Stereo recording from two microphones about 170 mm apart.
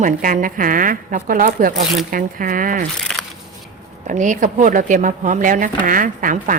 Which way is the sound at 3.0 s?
5° left (ahead or behind).